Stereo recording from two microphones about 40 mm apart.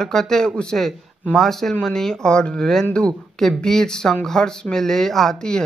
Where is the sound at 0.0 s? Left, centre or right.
Centre.